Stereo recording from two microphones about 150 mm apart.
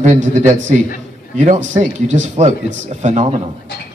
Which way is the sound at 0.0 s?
50° right (ahead or behind).